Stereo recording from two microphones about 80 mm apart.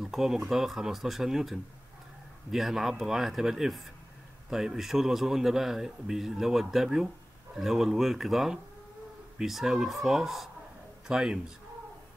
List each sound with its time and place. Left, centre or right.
0.0 s a man's voice: centre